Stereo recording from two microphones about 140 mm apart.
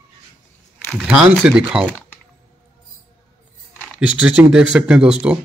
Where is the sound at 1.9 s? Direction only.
10° left (ahead or behind).